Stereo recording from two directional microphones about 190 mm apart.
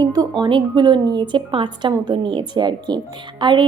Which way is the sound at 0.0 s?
20° right (ahead or behind).